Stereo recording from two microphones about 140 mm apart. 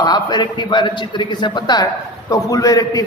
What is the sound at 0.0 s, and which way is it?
A man's voice, 30° left (ahead or behind).